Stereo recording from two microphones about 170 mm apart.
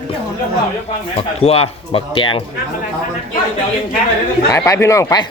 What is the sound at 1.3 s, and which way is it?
Speech, 35° left (ahead or behind).